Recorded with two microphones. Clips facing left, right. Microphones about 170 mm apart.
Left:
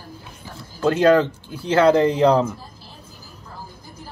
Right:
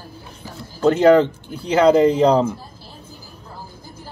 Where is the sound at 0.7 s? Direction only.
15° right (ahead or behind).